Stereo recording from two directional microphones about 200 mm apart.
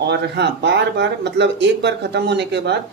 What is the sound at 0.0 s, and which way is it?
Speech, 60° right (ahead or behind).